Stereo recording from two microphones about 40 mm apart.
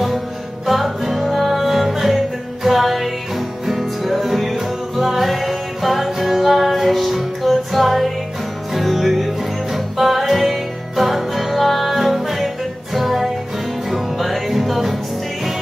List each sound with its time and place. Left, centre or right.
0.7 s music: centre